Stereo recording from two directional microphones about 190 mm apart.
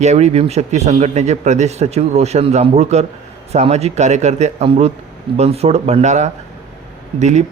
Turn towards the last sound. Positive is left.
turn(degrees=-35)  # may be behind; listen again after turning